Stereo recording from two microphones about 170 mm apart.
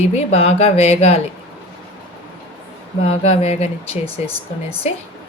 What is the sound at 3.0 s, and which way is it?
Speech, 35° left (ahead or behind).